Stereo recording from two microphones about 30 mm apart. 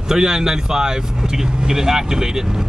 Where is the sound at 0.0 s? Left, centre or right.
Right.